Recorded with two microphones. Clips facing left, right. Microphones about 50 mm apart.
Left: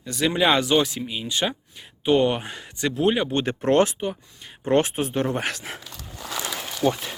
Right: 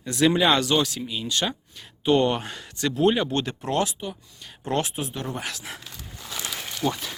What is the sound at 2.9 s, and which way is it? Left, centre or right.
Speech, centre.